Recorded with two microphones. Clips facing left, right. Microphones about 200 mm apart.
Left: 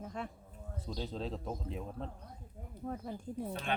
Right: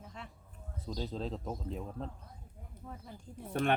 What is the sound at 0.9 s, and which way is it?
Speech, centre (ahead or behind).